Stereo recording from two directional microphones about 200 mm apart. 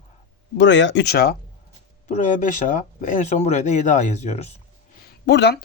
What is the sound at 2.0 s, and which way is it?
Speech, 35° left (ahead or behind).